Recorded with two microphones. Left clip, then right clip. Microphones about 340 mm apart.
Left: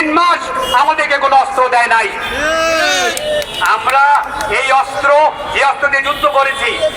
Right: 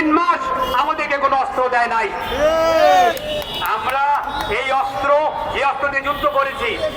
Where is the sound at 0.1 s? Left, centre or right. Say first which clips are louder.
Left 4 dB; left.